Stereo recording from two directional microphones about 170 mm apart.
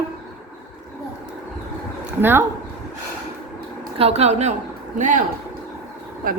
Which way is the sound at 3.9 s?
35° right (ahead or behind).